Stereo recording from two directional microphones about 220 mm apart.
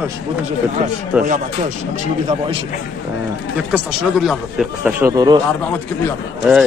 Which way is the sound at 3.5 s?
5° right (ahead or behind).